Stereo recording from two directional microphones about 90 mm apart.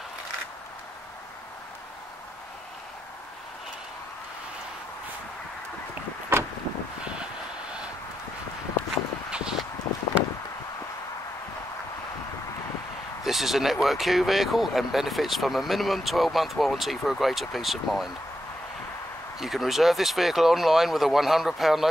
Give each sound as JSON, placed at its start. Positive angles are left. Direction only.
{"t": 6.3, "sound": "vehicle", "side_deg": -25}
{"t": 9.3, "sound": "a sound", "side_deg": -10}
{"t": 13.2, "sound": "speech", "side_deg": 0}
{"t": 19.4, "sound": "speech", "side_deg": 0}